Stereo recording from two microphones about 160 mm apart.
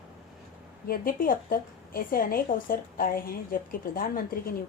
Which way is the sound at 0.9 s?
65° left (ahead or behind).